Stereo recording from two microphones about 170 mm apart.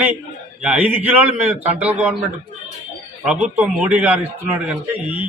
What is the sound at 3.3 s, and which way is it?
A man's voice, 10° right (ahead or behind).